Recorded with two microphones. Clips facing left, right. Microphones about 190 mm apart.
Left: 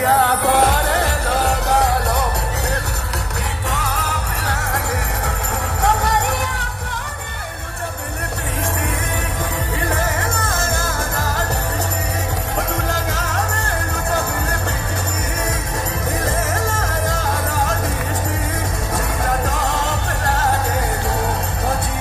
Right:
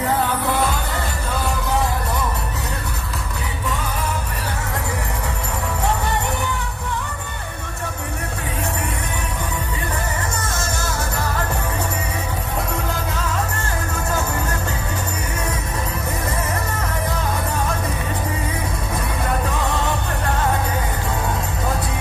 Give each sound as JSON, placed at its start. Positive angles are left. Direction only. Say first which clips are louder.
{"t": 0.0, "sound": "music", "louder": "left 4 dB", "side_deg": 75}
{"t": 3.6, "sound": "music", "louder": "even", "side_deg": 75}
{"t": 5.9, "sound": "music", "louder": "left 5 dB", "side_deg": 80}
{"t": 12.9, "sound": "music", "louder": "left 1 dB", "side_deg": 85}